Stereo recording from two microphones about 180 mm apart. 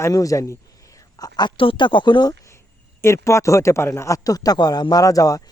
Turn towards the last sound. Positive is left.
turn(degrees=20)  # may be behind; listen again after turning